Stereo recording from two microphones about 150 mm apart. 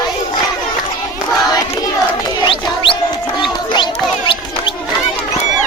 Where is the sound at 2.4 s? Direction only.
35° left (ahead or behind).